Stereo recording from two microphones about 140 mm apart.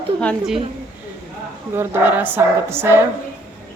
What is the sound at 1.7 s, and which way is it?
Speech, 15° right (ahead or behind).